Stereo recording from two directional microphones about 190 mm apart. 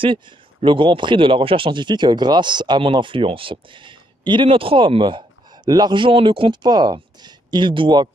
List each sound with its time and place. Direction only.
0.0 s speech: 25° right (ahead or behind)